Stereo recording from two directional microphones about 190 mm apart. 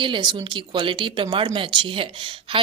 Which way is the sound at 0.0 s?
25° right (ahead or behind).